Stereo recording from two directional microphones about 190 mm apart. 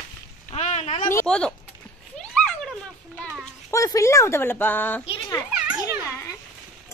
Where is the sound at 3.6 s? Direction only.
15° left (ahead or behind).